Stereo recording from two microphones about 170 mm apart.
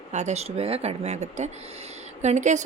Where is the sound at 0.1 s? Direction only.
40° right (ahead or behind).